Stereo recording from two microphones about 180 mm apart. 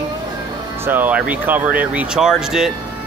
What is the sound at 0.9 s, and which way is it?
Speech, 10° right (ahead or behind).